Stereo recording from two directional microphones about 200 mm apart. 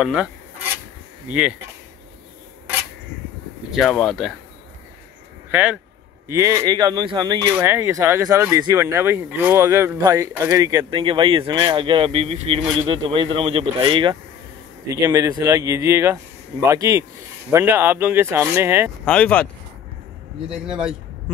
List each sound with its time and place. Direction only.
0.0 s speech: 5° right (ahead or behind)
3.7 s speech: centre (ahead or behind)
5.5 s speech: 10° right (ahead or behind)
19.0 s speech: 5° left (ahead or behind)
20.4 s speech: 5° right (ahead or behind)